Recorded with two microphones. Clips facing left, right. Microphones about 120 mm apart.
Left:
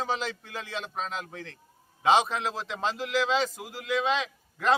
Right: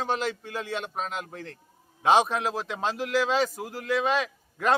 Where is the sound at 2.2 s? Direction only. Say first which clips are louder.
Right 4 dB; 45° right (ahead or behind).